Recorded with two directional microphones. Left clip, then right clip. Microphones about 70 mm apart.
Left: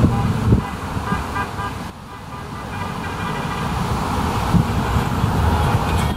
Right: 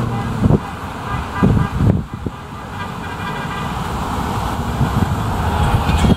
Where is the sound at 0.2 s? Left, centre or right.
Right.